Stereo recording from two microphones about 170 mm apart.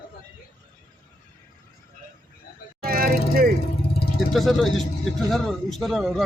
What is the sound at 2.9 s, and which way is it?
Vehicle, 60° right (ahead or behind).